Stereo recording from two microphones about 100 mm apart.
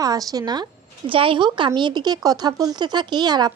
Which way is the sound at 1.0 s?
60° right (ahead or behind).